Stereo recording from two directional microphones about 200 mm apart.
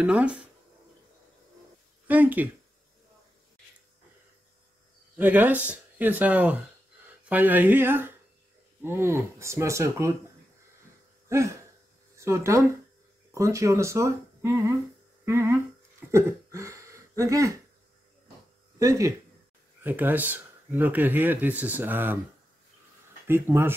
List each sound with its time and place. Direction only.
0.0 s speech: 5° right (ahead or behind)
2.0 s speech: 10° right (ahead or behind)
5.1 s speech: 10° right (ahead or behind)
11.2 s a sound: 15° right (ahead or behind)
12.2 s speech: 15° right (ahead or behind)
18.8 s speech: 15° right (ahead or behind)
23.2 s speech: 10° right (ahead or behind)